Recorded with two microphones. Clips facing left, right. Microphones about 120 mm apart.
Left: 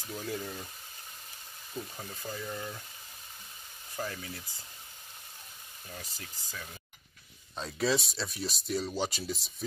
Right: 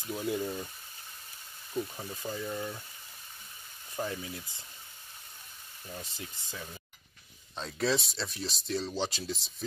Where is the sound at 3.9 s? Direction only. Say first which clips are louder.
Right 2 dB; 20° right (ahead or behind).